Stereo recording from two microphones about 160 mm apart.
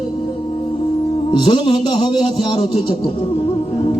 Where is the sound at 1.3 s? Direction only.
30° left (ahead or behind).